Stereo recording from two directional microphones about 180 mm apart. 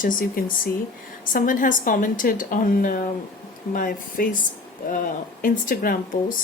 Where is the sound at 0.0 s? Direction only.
50° left (ahead or behind).